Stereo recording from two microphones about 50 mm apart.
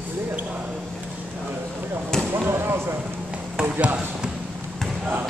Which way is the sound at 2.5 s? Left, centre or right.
Right.